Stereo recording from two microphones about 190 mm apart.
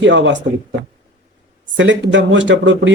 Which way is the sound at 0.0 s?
70° right (ahead or behind).